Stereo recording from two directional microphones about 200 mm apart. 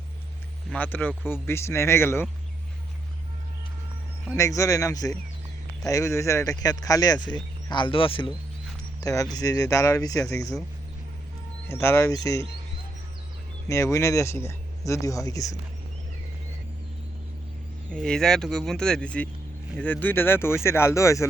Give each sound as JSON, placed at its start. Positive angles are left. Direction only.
{"t": 0.7, "sound": "speech", "side_deg": 10}
{"t": 4.4, "sound": "speech", "side_deg": 15}
{"t": 11.7, "sound": "speech", "side_deg": 15}
{"t": 13.7, "sound": "speech", "side_deg": 15}
{"t": 17.9, "sound": "speech", "side_deg": 5}